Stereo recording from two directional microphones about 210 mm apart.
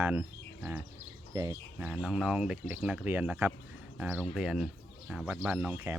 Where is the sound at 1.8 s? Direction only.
5° right (ahead or behind).